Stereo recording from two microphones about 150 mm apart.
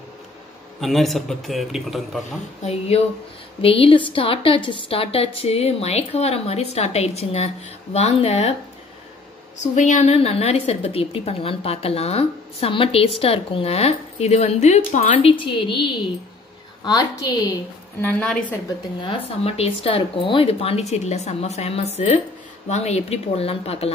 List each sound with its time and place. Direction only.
0.7 s a man's voice: centre (ahead or behind)
2.6 s a woman's voice: 45° left (ahead or behind)
9.6 s a woman's voice: 50° left (ahead or behind)
15.2 s a woman's voice: 35° left (ahead or behind)
18.0 s a woman's voice: 5° left (ahead or behind)
18.9 s a woman's voice: 40° left (ahead or behind)